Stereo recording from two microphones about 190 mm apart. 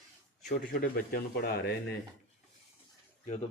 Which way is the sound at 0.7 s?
50° left (ahead or behind).